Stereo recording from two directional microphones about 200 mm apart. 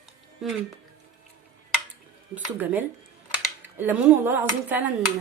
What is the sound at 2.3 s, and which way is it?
A woman's voice, 10° right (ahead or behind).